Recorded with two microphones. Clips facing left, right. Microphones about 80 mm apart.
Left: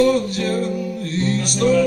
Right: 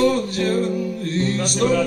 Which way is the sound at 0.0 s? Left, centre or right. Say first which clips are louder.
Left 2 dB; right.